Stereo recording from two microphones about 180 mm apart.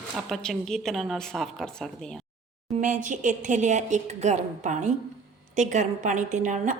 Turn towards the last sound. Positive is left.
turn(degrees=-45)  # may be behind; listen again after turning